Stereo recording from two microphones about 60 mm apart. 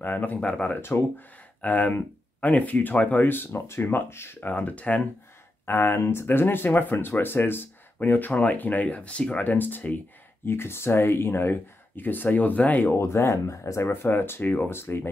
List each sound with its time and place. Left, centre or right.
0.0 s speech: left
0.7 s speech: left
4.4 s speech: left
5.7 s speech: left
10.4 s speech: left
12.0 s speech: left
12.9 s speech: left
13.8 s speech: left